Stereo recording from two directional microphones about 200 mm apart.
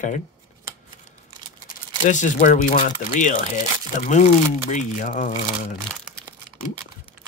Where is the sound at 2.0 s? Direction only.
40° left (ahead or behind).